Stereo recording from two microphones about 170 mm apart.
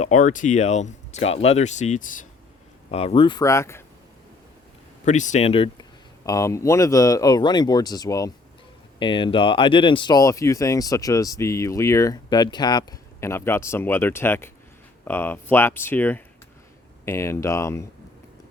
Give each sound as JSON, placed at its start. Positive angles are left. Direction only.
{"t": 0.0, "sound": "speech", "side_deg": 45}
{"t": 2.9, "sound": "speech", "side_deg": 35}
{"t": 5.0, "sound": "speech", "side_deg": 45}
{"t": 6.2, "sound": "speech", "side_deg": 20}